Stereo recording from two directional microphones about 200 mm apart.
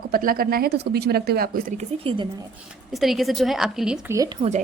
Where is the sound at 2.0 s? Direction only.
25° right (ahead or behind).